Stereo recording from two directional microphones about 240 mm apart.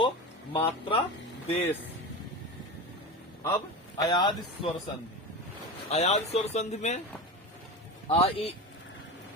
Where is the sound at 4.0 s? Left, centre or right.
Centre.